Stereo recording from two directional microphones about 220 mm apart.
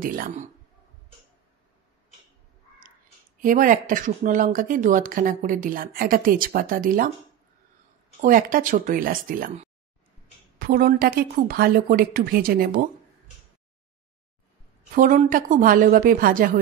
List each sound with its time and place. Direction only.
0.0 s speech: 40° right (ahead or behind)
3.3 s speech: 40° right (ahead or behind)
8.2 s speech: 40° right (ahead or behind)
15.0 s speech: 35° right (ahead or behind)